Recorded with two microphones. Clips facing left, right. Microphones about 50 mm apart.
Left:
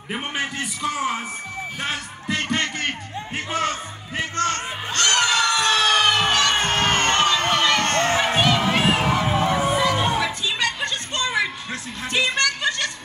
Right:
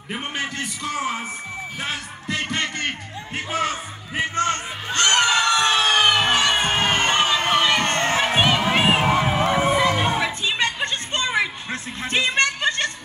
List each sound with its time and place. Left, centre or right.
0.1 s a man's voice: centre
4.2 s music: right